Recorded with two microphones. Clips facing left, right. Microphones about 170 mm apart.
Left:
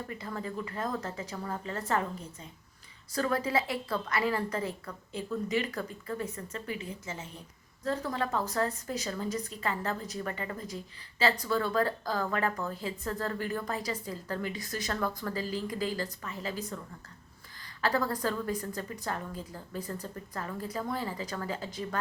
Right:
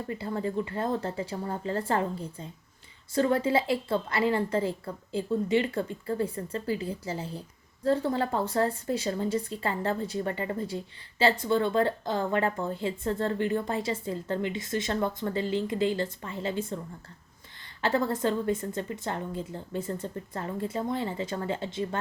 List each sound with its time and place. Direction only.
0.1 s speech: 30° right (ahead or behind)